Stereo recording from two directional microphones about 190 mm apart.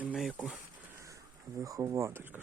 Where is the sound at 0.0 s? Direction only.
5° right (ahead or behind).